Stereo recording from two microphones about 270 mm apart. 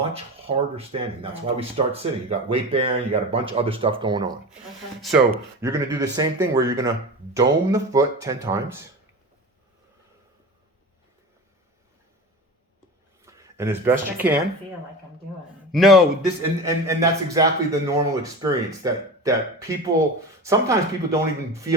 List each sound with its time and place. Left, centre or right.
0.4 s speech: right
4.9 s speech: centre
13.2 s speech: centre
15.7 s a man's voice: centre
16.6 s speech: centre